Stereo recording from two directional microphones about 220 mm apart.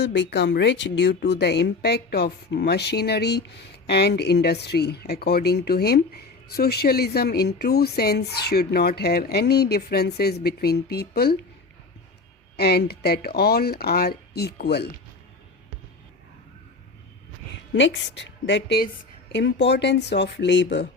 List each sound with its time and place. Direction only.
0.0 s a woman's voice: 50° left (ahead or behind)
12.5 s a woman's voice: 45° left (ahead or behind)
17.7 s a woman's voice: 55° left (ahead or behind)